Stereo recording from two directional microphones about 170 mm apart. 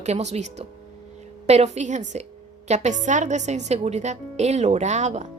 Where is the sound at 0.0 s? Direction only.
40° right (ahead or behind).